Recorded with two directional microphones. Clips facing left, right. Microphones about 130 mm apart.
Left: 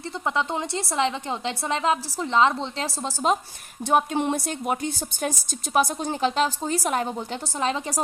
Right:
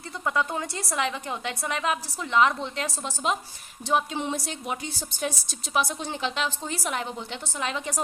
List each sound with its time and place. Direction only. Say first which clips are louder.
0.3 s a woman's voice: left 1 dB; 25° left (ahead or behind)
3.8 s a woman's voice: left 4 dB; 50° left (ahead or behind); by 8.0 s 35° left (ahead or behind)